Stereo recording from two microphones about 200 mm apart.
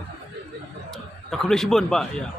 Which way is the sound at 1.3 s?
Centre (ahead or behind).